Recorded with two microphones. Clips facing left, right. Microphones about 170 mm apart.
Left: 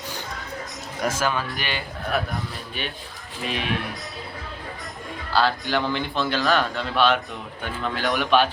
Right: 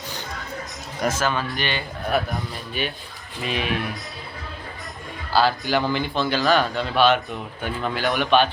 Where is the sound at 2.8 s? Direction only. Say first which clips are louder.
Right 5 dB; 5° right (ahead or behind).